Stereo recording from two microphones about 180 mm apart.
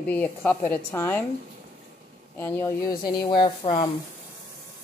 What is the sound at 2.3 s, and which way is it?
Speech, 15° left (ahead or behind).